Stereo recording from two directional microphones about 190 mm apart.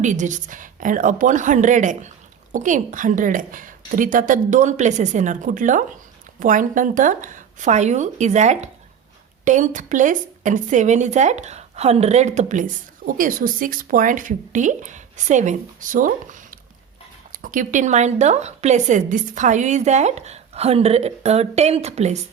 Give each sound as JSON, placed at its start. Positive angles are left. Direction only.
{"t": 0.0, "sound": "a woman's voice", "side_deg": -40}